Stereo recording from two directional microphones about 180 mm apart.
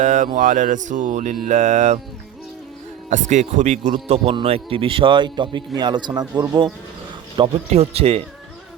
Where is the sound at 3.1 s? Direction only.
40° right (ahead or behind); by 6.7 s 25° right (ahead or behind).